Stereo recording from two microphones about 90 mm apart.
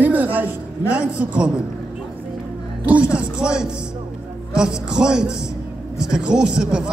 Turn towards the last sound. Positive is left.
turn(degrees=-10)  # may be behind; listen again after turning